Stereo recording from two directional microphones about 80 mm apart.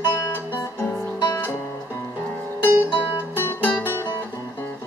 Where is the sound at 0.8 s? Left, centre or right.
Left.